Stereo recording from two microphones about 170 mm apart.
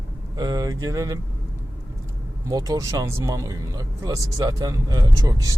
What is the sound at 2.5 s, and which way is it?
Speech, 20° right (ahead or behind).